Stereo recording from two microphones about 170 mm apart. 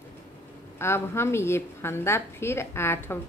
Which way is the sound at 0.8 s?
15° left (ahead or behind).